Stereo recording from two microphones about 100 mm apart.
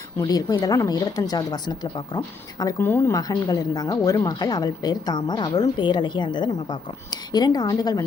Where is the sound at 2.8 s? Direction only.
25° left (ahead or behind).